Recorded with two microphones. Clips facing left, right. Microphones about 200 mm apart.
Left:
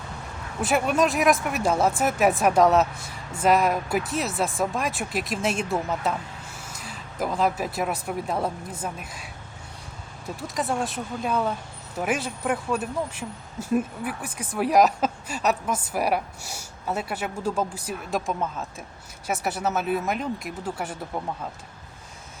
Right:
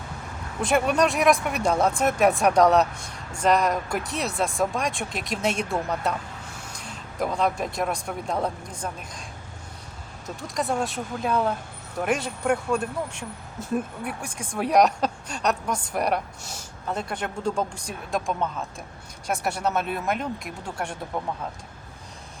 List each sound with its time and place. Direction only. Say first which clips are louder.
0.6 s speech: right 1 dB; 5° left (ahead or behind)
10.4 s speech: right 1 dB; centre (ahead or behind)